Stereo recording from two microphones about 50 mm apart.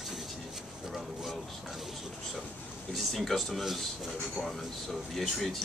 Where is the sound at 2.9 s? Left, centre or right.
Centre.